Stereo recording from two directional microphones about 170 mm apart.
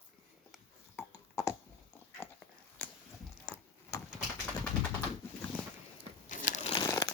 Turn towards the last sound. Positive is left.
turn(degrees=20)  # may be behind; listen again after turning